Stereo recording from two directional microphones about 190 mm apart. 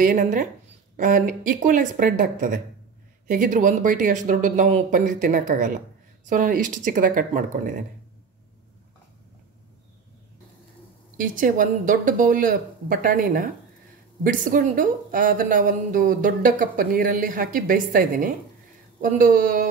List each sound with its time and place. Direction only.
0.0 s speech: 40° right (ahead or behind)
11.1 s speech: 45° right (ahead or behind)